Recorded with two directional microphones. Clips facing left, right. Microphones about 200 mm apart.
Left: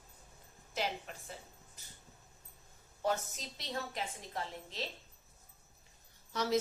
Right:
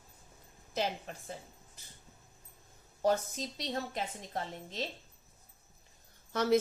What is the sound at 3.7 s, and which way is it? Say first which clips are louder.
Speech: right 1 dB; 40° right (ahead or behind).